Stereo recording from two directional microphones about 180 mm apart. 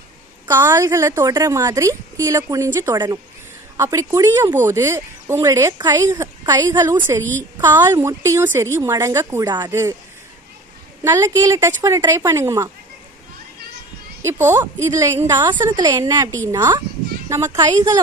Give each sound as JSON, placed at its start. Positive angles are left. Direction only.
{"t": 0.5, "sound": "a woman's voice", "side_deg": -15}
{"t": 11.1, "sound": "a woman's voice", "side_deg": -20}
{"t": 14.2, "sound": "a woman's voice", "side_deg": -10}